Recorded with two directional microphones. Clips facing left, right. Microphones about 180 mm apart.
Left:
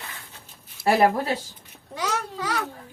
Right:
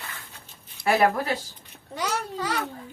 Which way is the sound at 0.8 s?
5° left (ahead or behind).